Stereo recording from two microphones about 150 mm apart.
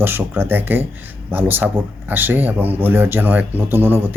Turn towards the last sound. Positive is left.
turn(degrees=-15)  # may be behind; listen again after turning